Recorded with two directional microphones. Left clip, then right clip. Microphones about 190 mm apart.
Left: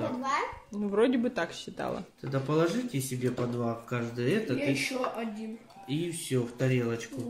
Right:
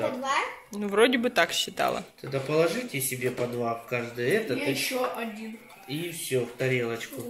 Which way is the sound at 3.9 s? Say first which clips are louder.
Right 4 dB; 60° left (ahead or behind).